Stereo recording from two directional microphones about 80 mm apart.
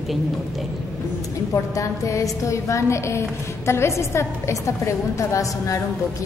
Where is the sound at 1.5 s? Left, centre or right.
Left.